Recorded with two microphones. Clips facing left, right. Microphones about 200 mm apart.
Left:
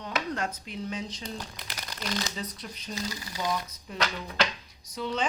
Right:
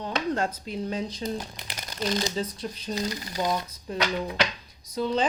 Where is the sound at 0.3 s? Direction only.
30° right (ahead or behind).